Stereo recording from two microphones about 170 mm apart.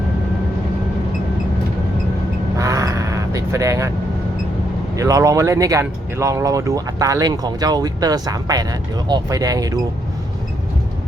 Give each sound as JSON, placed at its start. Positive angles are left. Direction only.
{"t": 2.6, "sound": "vehicle", "side_deg": -20}
{"t": 4.9, "sound": "speech", "side_deg": -20}